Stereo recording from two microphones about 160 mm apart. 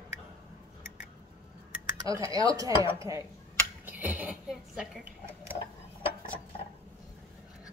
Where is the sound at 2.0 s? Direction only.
20° right (ahead or behind).